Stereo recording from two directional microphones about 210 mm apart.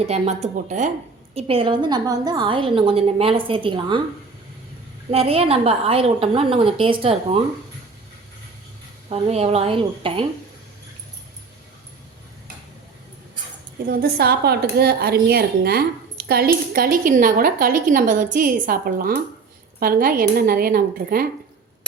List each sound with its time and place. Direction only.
0.0 s a woman's voice: 30° right (ahead or behind)
5.1 s a woman's voice: 30° right (ahead or behind)
9.0 s a woman's voice: 30° right (ahead or behind)
13.8 s a woman's voice: 45° right (ahead or behind)